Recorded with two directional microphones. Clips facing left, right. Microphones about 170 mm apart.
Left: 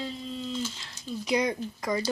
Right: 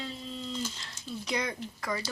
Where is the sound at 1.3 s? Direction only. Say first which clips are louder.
Left 7 dB; 15° left (ahead or behind).